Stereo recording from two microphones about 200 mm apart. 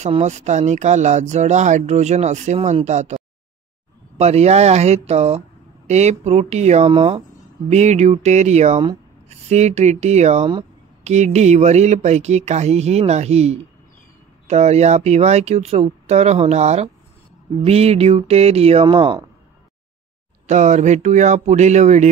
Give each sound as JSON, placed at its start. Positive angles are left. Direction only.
{"t": 0.0, "sound": "speech", "side_deg": -35}
{"t": 4.2, "sound": "speech", "side_deg": -30}
{"t": 20.4, "sound": "speech", "side_deg": -35}